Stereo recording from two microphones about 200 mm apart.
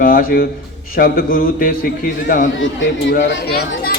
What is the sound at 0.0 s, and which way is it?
A man's voice, 45° left (ahead or behind).